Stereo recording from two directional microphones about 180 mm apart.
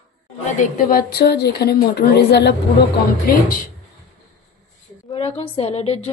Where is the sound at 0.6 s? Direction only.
55° left (ahead or behind).